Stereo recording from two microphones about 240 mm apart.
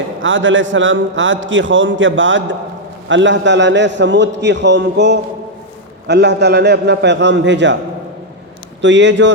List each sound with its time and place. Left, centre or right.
0.2 s a man's voice: right
8.8 s a man's voice: right